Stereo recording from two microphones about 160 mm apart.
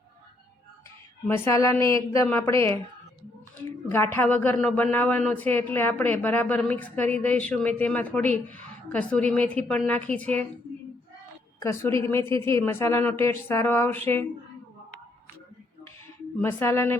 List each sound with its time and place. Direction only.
1.3 s a woman's voice: 15° left (ahead or behind)
11.6 s a woman's voice: 15° left (ahead or behind)
16.4 s a woman's voice: 15° left (ahead or behind)